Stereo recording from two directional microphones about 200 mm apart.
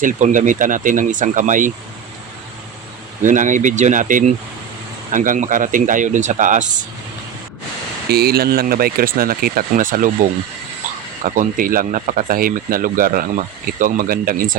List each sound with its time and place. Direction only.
0.0 s speech: 40° right (ahead or behind)
3.2 s speech: 40° right (ahead or behind)
8.1 s speech: 50° right (ahead or behind)
11.2 s speech: 45° right (ahead or behind)